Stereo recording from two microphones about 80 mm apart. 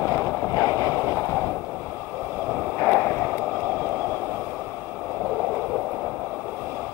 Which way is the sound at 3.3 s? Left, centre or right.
Right.